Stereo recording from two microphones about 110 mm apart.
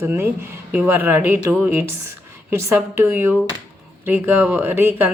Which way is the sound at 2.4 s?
20° right (ahead or behind).